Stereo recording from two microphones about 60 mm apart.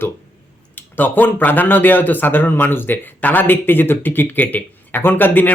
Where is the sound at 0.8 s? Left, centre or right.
Left.